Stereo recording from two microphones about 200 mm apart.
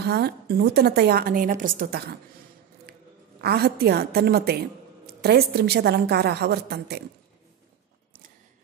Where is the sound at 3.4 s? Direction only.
50° right (ahead or behind).